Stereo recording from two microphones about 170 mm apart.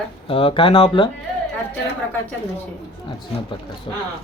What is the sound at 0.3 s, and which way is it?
Speech, 30° left (ahead or behind).